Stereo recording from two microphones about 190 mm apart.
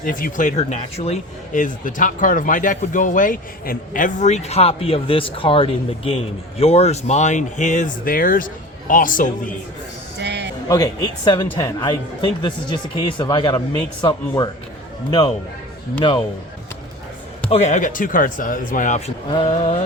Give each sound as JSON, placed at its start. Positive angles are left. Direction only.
{"t": 0.0, "sound": "a man's voice", "side_deg": 45}
{"t": 10.2, "sound": "a sound", "side_deg": -65}
{"t": 10.7, "sound": "speech", "side_deg": 20}
{"t": 16.0, "sound": "speech", "side_deg": 25}
{"t": 17.5, "sound": "a man's voice", "side_deg": 40}